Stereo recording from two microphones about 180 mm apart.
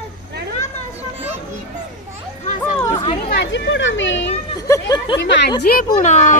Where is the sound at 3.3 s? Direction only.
80° left.